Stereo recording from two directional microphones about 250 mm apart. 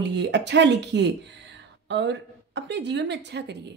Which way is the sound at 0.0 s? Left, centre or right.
Right.